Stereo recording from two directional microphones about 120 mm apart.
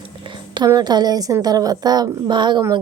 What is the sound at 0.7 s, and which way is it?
A woman's voice, 35° right (ahead or behind).